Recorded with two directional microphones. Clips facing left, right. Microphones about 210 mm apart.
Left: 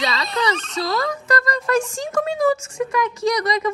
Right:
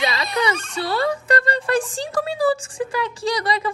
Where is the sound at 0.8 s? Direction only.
30° right (ahead or behind).